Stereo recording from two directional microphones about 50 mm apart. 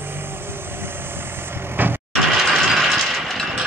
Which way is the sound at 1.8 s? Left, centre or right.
Right.